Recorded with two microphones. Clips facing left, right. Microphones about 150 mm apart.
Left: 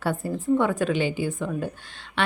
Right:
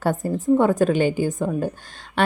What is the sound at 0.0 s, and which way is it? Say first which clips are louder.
Speech: right 4 dB; 40° right (ahead or behind).